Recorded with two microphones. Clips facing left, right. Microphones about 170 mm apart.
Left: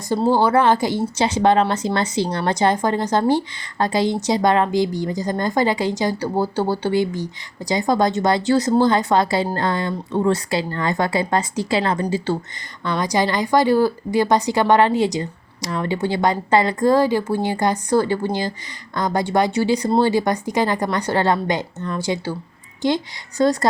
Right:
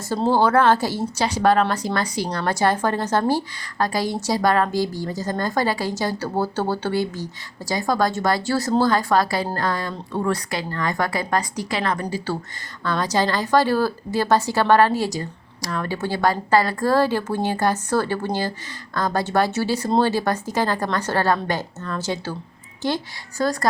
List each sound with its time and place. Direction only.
0.1 s a woman's voice: 15° left (ahead or behind)